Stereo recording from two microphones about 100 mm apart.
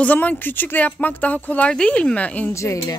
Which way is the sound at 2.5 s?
30° left (ahead or behind).